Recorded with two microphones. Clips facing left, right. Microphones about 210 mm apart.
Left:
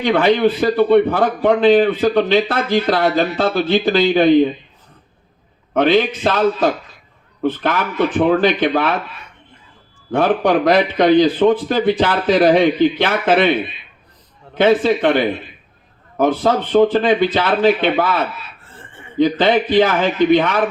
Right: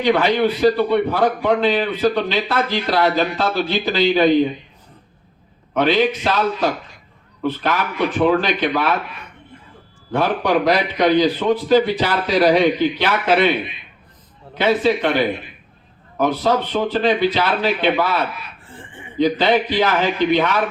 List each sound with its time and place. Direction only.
0.0 s a man's voice: 50° left (ahead or behind)
5.7 s a man's voice: 50° left (ahead or behind)
10.1 s a man's voice: 50° left (ahead or behind)
18.6 s chicken: 15° right (ahead or behind)
19.1 s a man's voice: 50° left (ahead or behind)